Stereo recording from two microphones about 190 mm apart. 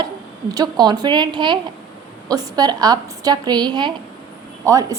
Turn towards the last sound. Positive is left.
turn(degrees=-20)  # may be behind; listen again after turning